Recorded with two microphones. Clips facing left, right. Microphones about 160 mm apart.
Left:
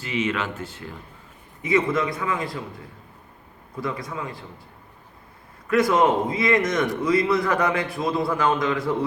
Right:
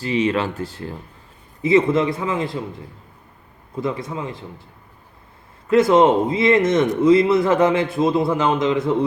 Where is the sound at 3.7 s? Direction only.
25° right (ahead or behind).